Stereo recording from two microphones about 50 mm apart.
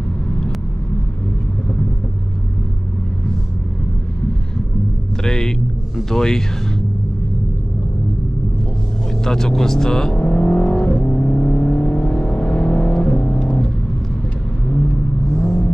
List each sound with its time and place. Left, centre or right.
5.2 s speech: centre
9.2 s speech: centre
11.1 s vehicle: left
15.3 s vehicle: centre